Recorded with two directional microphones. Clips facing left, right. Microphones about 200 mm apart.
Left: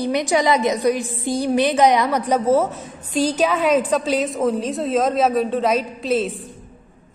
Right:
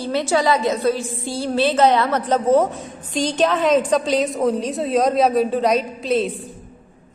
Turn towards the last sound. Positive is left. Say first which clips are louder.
# right 1 dB
turn(degrees=0)  # may be behind; listen again after turning